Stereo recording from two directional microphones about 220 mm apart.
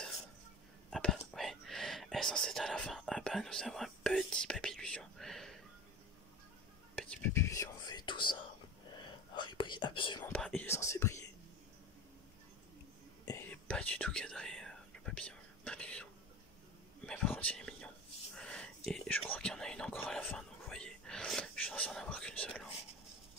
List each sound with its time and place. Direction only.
0.8 s whispering: centre (ahead or behind)
7.0 s whispering: 5° left (ahead or behind); by 10.2 s 20° left (ahead or behind)
10.2 s whispering: 5° left (ahead or behind)
13.5 s whispering: 5° left (ahead or behind)